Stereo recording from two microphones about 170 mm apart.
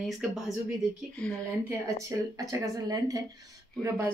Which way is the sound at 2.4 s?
20° right (ahead or behind).